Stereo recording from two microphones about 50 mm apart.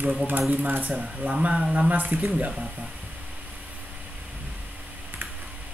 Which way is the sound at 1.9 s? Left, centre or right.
Right.